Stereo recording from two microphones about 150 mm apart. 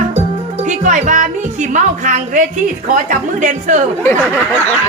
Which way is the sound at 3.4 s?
55° right (ahead or behind).